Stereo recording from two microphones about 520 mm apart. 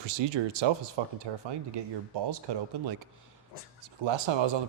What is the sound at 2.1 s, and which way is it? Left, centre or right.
Speech, right.